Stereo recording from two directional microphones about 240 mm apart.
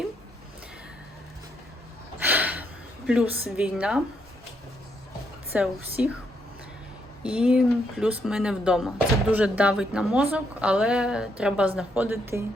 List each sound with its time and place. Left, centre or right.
2.2 s a sound: centre
3.1 s a woman's voice: centre
5.5 s a woman's voice: centre
7.2 s a woman's voice: centre